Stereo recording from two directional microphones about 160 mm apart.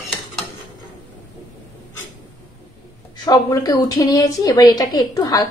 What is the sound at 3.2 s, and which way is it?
A woman's voice, 25° left (ahead or behind).